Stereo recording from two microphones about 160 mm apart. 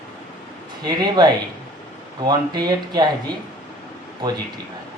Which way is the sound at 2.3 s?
25° right (ahead or behind).